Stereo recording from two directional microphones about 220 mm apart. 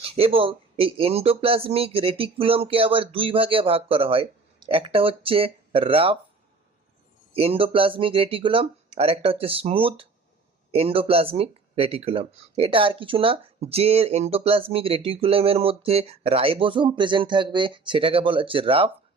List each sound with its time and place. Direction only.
0.0 s speech: 25° right (ahead or behind)
7.3 s speech: 25° right (ahead or behind)